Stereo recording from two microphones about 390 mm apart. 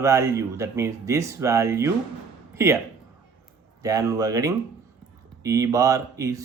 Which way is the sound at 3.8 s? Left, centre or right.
Centre.